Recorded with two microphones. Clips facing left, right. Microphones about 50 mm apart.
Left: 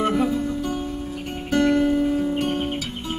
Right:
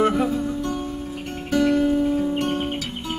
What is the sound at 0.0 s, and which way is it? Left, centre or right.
Music, centre.